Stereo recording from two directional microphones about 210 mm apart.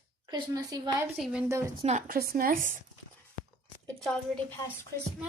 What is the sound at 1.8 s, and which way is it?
Speech, 35° right (ahead or behind).